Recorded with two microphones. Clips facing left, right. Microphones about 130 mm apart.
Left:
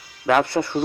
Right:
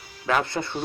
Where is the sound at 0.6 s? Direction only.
25° left (ahead or behind).